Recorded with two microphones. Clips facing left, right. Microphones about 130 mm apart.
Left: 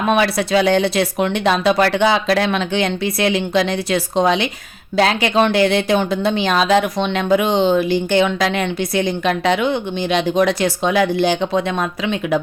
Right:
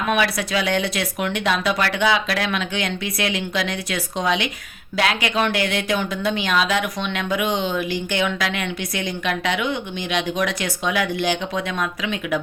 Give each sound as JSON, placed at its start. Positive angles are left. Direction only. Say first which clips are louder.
{"t": 0.1, "sound": "speech", "louder": "left 6 dB", "side_deg": 30}